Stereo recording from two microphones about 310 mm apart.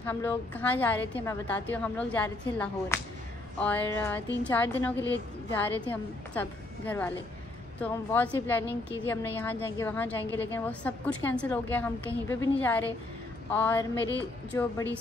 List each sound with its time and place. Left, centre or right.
0.0 s a woman's voice: centre